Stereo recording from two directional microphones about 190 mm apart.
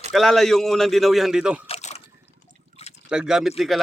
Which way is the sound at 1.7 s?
35° left (ahead or behind).